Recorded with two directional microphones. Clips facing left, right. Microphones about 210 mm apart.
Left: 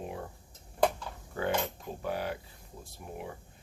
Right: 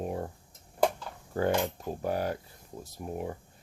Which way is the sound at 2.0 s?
45° right (ahead or behind).